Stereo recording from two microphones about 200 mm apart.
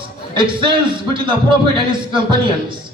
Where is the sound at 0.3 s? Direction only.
25° right (ahead or behind).